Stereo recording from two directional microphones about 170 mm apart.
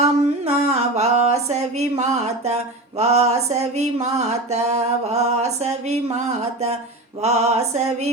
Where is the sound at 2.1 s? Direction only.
40° right (ahead or behind).